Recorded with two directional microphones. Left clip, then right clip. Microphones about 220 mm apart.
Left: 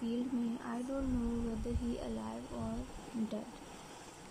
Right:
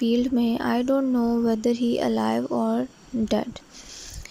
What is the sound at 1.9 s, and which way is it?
Speech, 35° right (ahead or behind).